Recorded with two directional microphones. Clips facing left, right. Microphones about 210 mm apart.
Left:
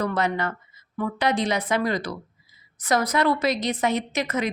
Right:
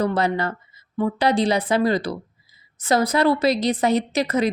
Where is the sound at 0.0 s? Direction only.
30° right (ahead or behind).